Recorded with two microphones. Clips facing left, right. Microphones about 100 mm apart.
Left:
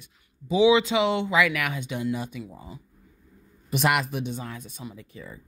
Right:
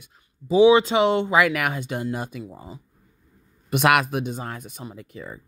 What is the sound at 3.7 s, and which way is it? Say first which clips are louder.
Speech: right 5 dB; 60° right (ahead or behind).